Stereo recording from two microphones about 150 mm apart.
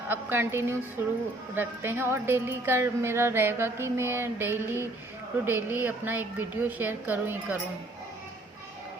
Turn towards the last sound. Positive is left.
turn(degrees=-15)  # may be behind; listen again after turning